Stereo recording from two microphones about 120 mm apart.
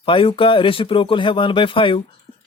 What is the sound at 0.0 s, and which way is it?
Speech, 45° left (ahead or behind).